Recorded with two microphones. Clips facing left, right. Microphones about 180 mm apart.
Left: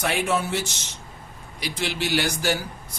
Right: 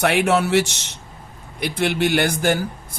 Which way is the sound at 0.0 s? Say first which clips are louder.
Right 6 dB; 65° right (ahead or behind).